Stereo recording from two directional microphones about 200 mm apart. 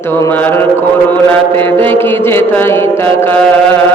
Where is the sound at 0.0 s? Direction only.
10° left (ahead or behind).